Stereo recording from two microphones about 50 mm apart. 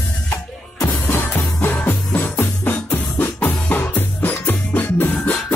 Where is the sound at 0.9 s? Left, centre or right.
Left.